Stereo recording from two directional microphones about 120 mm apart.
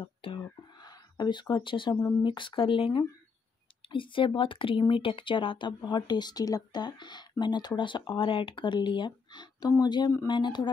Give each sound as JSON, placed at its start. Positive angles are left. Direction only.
{"t": 0.0, "sound": "whispering", "side_deg": 45}
{"t": 2.2, "sound": "speech", "side_deg": 40}